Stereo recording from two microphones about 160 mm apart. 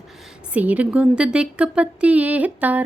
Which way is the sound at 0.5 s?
10° right (ahead or behind).